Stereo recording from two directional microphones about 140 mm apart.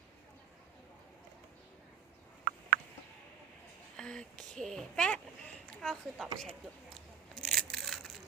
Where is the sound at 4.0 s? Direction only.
5° left (ahead or behind).